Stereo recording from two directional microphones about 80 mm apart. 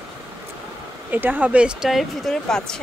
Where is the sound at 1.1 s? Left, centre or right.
Right.